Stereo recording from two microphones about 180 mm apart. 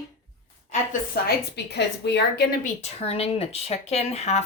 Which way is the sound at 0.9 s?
65° left (ahead or behind).